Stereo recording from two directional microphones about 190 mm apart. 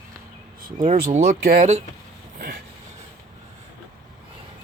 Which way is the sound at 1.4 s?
50° right (ahead or behind).